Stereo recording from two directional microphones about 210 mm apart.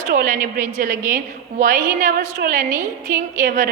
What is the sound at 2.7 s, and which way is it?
Speech, 15° right (ahead or behind).